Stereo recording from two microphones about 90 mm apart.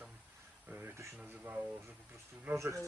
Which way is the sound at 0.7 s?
20° right (ahead or behind).